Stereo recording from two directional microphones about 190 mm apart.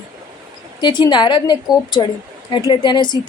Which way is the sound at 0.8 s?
25° left (ahead or behind).